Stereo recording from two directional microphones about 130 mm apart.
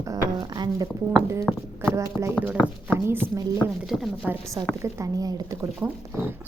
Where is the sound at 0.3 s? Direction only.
35° right (ahead or behind).